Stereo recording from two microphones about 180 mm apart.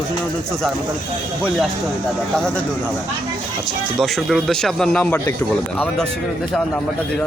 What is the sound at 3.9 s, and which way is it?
Speech, centre (ahead or behind).